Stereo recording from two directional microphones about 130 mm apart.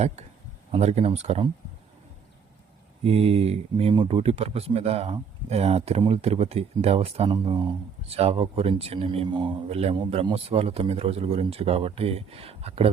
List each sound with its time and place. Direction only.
0.7 s speech: 55° right (ahead or behind)
3.0 s speech: 50° right (ahead or behind)
7.3 s speech: 35° right (ahead or behind)
8.1 s speech: 50° right (ahead or behind)